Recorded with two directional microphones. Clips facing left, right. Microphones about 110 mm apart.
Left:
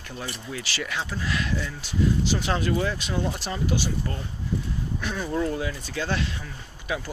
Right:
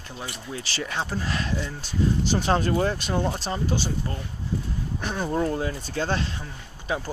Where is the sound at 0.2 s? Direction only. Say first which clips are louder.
Even; 30° right (ahead or behind).